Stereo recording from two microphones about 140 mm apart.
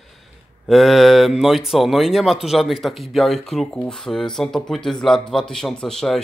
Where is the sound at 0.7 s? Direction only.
Centre (ahead or behind).